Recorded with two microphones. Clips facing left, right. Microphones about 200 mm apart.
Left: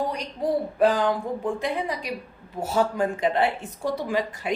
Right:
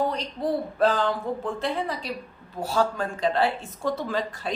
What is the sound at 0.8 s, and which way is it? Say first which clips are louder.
Speech: left 2 dB; 15° left (ahead or behind).